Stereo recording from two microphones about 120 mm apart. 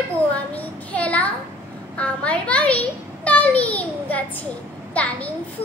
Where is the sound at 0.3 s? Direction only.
10° left (ahead or behind).